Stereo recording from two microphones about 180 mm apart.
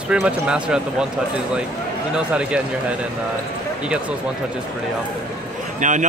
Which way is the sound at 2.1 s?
5° right (ahead or behind).